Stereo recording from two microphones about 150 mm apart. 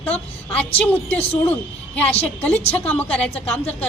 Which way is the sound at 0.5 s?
10° left (ahead or behind).